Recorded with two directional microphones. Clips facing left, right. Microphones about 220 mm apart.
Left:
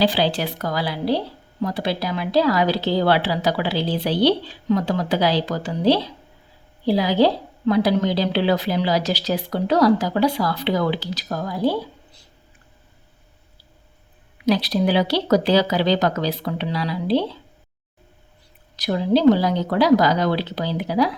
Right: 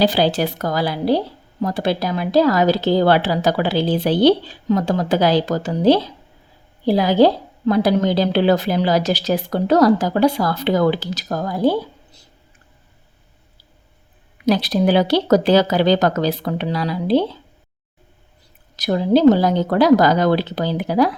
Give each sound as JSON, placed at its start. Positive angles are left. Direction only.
{"t": 0.0, "sound": "a woman's voice", "side_deg": -45}
{"t": 14.4, "sound": "a woman's voice", "side_deg": -50}
{"t": 18.8, "sound": "a woman's voice", "side_deg": -45}